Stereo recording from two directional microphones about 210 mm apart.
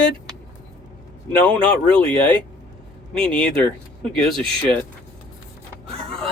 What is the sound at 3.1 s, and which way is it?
Speech, 5° left (ahead or behind).